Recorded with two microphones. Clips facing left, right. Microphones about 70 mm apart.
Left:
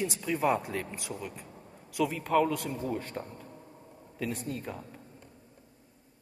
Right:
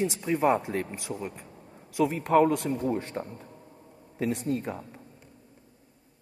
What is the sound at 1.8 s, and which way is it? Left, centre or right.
A man's voice, right.